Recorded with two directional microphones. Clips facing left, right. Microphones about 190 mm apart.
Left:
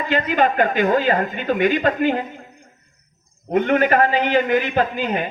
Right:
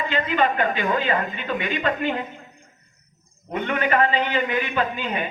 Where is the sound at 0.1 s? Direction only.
40° left (ahead or behind).